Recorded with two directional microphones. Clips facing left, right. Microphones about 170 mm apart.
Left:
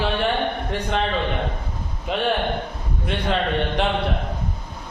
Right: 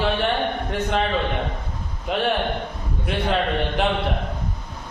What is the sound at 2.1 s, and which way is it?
Speech, centre (ahead or behind).